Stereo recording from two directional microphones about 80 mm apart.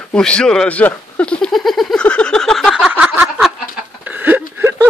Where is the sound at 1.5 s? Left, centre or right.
Centre.